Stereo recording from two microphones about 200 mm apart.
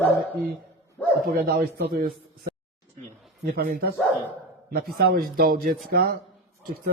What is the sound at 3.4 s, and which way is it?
Speech, 50° right (ahead or behind).